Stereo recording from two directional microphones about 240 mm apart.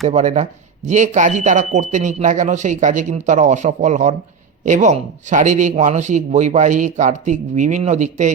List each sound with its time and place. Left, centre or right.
0.1 s speech: right